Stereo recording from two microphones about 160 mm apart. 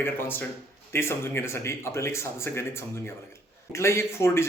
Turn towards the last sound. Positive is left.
turn(degrees=15)  # may be behind; listen again after turning